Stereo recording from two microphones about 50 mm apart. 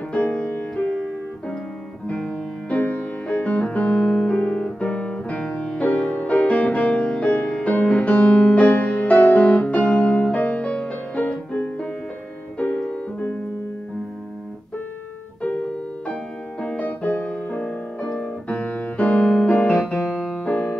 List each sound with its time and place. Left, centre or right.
0.1 s music: left
16.6 s music: left
19.7 s music: centre
20.3 s keyboard: left